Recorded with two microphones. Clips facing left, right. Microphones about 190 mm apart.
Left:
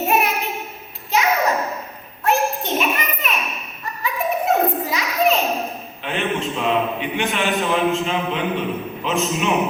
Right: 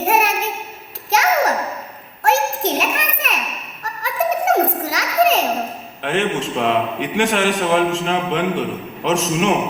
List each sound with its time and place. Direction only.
0.1 s a sound: 85° right
2.2 s children playing: 90° right
6.0 s a man's voice: 85° right